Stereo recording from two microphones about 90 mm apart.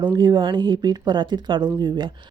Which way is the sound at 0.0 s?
55° right (ahead or behind).